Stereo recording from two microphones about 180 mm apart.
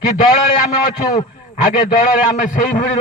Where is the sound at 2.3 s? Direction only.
45° left (ahead or behind).